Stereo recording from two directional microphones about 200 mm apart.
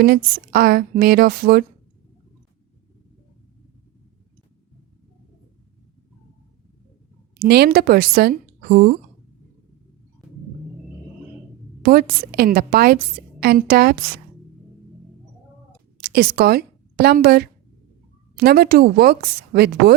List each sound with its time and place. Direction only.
0.0 s a woman's voice: 50° right (ahead or behind)
7.3 s a woman's voice: 50° right (ahead or behind)
11.8 s a woman's voice: 45° right (ahead or behind)
16.0 s a woman's voice: 50° right (ahead or behind)